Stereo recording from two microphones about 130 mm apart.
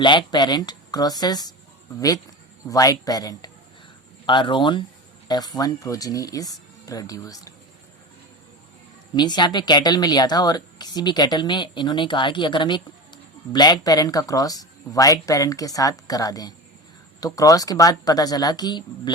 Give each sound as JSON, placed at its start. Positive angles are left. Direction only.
{"t": 0.0, "sound": "speech", "side_deg": 35}
{"t": 2.6, "sound": "speech", "side_deg": 30}
{"t": 9.1, "sound": "speech", "side_deg": 35}